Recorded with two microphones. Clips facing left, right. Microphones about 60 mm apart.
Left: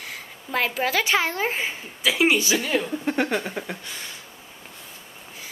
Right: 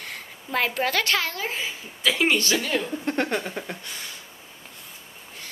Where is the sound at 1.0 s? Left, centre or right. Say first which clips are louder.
Left 3 dB; left.